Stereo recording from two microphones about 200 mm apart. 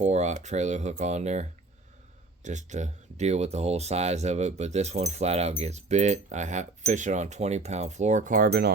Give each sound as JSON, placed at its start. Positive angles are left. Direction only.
{"t": 0.0, "sound": "speech", "side_deg": -35}